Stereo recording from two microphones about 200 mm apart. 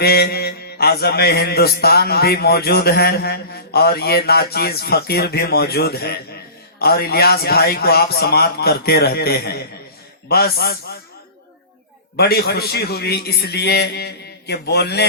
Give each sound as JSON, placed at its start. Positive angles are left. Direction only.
{"t": 0.0, "sound": "a man's voice", "side_deg": 50}
{"t": 12.1, "sound": "a man's voice", "side_deg": 50}